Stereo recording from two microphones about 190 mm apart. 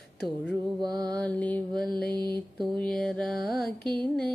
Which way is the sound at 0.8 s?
20° right (ahead or behind).